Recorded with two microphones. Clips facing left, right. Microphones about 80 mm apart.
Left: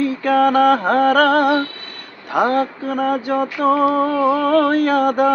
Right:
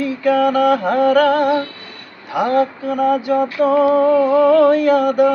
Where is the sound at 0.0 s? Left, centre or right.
Left.